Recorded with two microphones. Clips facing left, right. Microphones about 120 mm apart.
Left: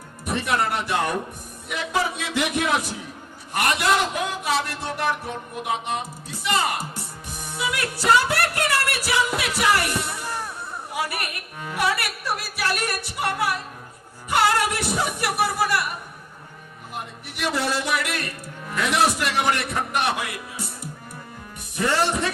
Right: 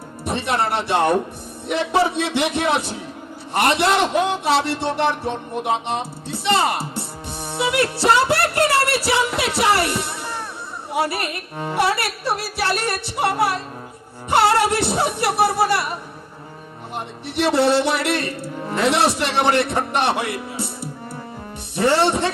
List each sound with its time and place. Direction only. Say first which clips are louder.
0.3 s a man's voice: right 2 dB; 30° right (ahead or behind)